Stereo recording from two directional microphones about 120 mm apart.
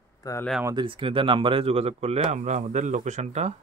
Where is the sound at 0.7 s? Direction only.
45° right (ahead or behind); by 3.5 s 70° right (ahead or behind).